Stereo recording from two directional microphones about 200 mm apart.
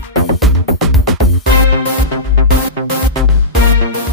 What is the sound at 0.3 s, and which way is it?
Music, centre (ahead or behind).